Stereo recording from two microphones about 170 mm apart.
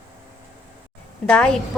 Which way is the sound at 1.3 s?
5° left (ahead or behind).